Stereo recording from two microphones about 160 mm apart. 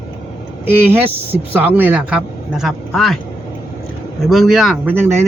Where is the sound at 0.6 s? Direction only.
15° right (ahead or behind).